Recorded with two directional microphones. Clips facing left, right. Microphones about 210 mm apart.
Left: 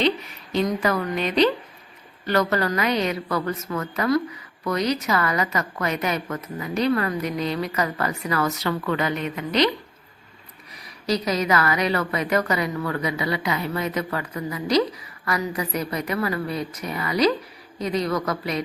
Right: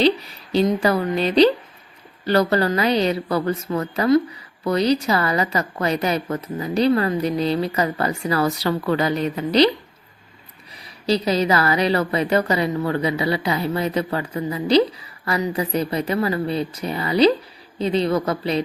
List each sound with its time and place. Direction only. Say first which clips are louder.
0.0 s a woman's voice: right 4 dB; 35° right (ahead or behind)
11.0 s a woman's voice: right 4 dB; 30° right (ahead or behind)